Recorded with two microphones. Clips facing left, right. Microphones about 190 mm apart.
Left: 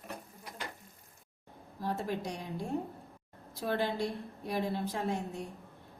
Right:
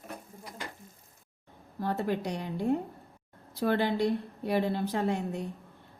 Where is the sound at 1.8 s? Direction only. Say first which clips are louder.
Right 4 dB; 65° right (ahead or behind).